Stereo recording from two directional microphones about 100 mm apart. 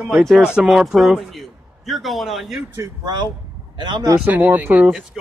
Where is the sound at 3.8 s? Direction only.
45° right (ahead or behind).